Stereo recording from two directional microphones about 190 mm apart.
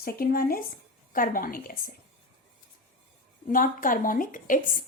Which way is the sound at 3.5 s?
45° left (ahead or behind).